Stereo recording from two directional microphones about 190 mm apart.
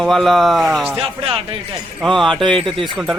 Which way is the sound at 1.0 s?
30° right (ahead or behind).